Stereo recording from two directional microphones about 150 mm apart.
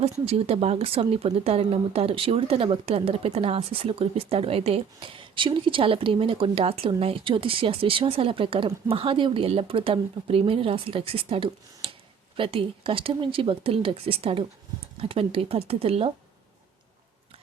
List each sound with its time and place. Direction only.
0.0 s speech: 40° right (ahead or behind)